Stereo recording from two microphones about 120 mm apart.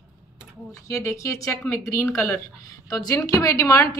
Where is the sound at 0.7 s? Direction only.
25° left (ahead or behind).